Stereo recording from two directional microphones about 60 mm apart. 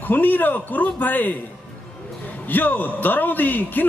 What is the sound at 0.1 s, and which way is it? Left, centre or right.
A man's voice, left.